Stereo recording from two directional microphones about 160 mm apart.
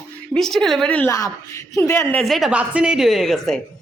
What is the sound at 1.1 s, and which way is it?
Speech, 20° left (ahead or behind).